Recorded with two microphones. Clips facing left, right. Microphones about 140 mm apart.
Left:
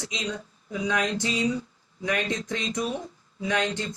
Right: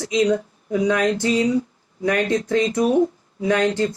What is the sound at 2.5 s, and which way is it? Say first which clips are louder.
Speech: right 13 dB; 65° right (ahead or behind).